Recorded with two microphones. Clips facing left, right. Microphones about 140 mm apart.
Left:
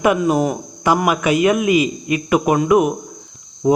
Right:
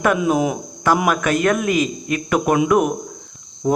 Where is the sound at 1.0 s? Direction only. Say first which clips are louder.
Left 2 dB; 10° left (ahead or behind).